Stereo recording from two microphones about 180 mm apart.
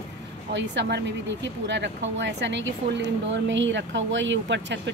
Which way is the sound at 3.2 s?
90° right.